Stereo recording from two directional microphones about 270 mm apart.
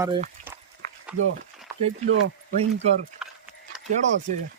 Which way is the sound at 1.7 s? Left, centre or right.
Centre.